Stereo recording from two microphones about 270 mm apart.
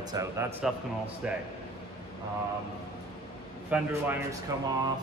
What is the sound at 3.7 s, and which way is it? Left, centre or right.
Speech, centre.